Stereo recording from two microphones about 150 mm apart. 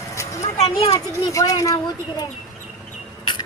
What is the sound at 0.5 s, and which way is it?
Speech, 40° left (ahead or behind).